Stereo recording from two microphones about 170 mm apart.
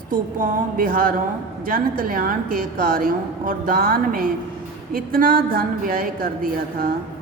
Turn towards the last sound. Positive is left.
turn(degrees=-60)  # may be behind; listen again after turning